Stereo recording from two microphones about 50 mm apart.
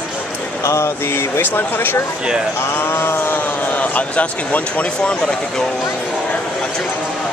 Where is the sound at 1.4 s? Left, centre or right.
Left.